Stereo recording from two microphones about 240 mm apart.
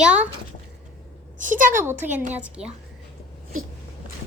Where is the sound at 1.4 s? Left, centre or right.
Right.